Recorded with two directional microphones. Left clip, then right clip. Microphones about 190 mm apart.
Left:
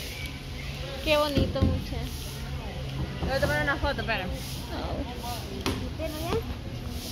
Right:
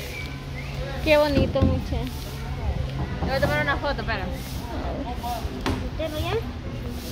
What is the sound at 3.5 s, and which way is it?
Speech, 50° left (ahead or behind).